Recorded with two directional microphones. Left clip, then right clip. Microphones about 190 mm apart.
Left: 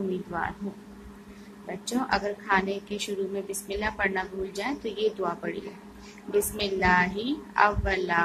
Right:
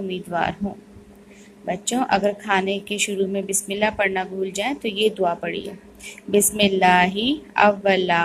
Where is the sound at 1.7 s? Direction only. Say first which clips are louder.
Right 7 dB; 25° right (ahead or behind).